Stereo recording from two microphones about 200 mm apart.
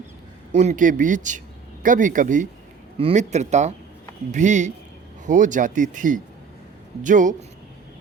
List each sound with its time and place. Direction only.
0.5 s speech: 35° right (ahead or behind)